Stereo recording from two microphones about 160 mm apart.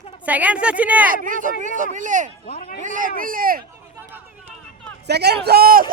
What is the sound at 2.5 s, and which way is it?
Speech, 60° left (ahead or behind).